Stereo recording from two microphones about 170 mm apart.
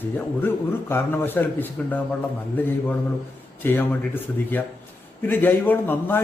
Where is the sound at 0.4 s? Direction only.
15° left (ahead or behind).